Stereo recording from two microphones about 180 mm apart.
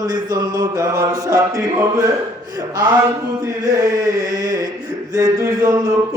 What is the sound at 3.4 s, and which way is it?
Mantra, 20° right (ahead or behind).